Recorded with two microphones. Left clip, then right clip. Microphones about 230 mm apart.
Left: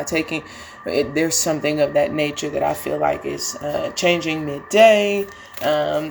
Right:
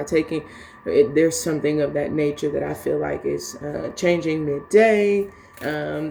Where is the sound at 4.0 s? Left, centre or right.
Centre.